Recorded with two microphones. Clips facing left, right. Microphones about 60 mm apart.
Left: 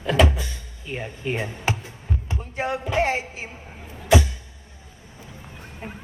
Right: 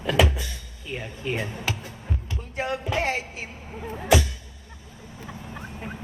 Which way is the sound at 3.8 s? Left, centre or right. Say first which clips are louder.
Right 11 dB; right.